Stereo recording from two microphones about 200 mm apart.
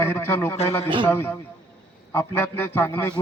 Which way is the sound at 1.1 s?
10° left (ahead or behind).